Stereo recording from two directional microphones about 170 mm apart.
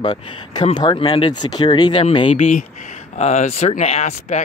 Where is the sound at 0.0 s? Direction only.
25° left (ahead or behind).